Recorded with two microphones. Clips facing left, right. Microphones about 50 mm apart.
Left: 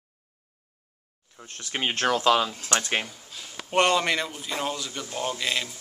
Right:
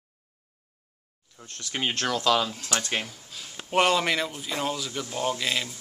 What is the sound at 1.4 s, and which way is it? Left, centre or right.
Speech, centre.